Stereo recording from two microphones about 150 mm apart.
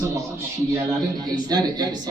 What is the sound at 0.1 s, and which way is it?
A man's voice, 20° right (ahead or behind).